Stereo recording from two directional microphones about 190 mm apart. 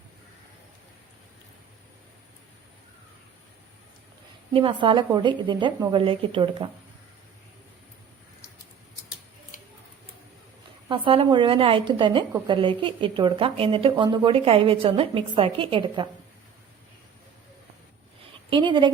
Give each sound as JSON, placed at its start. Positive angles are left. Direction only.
{"t": 4.5, "sound": "a woman's voice", "side_deg": -30}
{"t": 10.8, "sound": "a woman's voice", "side_deg": -25}
{"t": 18.5, "sound": "a woman's voice", "side_deg": -25}